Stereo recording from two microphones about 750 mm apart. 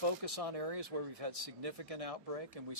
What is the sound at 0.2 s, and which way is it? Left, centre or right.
Speech, right.